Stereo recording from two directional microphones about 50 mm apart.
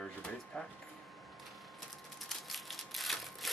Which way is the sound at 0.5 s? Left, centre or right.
Centre.